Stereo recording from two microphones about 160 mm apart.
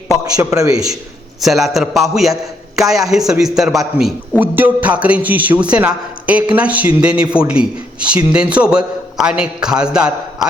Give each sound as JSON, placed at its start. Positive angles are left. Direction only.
{"t": 0.3, "sound": "a man's voice", "side_deg": -20}
{"t": 1.4, "sound": "a man's voice", "side_deg": 0}